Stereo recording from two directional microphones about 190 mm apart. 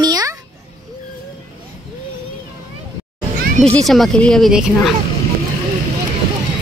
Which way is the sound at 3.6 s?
Centre (ahead or behind).